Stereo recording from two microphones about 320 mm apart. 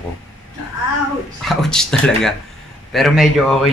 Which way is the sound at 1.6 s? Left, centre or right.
Centre.